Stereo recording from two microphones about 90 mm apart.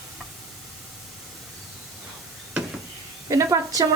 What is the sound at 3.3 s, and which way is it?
Speech, 35° right (ahead or behind).